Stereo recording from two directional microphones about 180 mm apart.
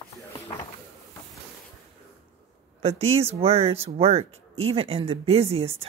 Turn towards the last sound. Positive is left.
turn(degrees=-35)  # may be behind; listen again after turning